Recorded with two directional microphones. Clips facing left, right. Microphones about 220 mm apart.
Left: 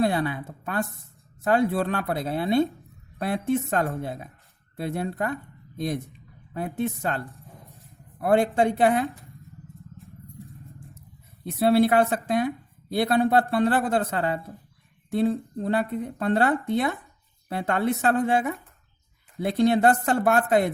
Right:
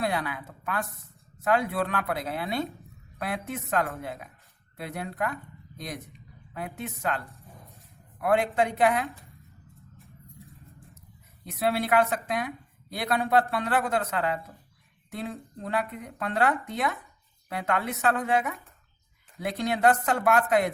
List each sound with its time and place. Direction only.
0.0 s speech: 30° left (ahead or behind)
6.5 s a woman's voice: 30° left (ahead or behind)
8.2 s a woman's voice: 30° left (ahead or behind)
9.7 s vehicle: centre (ahead or behind)
11.5 s a woman's voice: 30° left (ahead or behind)